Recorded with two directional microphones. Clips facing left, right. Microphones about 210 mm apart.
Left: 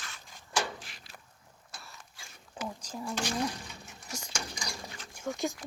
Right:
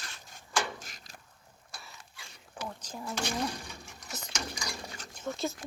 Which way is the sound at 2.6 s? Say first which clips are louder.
Left 2 dB; 25° left (ahead or behind).